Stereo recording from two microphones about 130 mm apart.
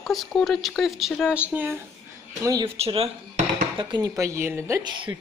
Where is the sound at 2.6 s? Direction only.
50° right (ahead or behind).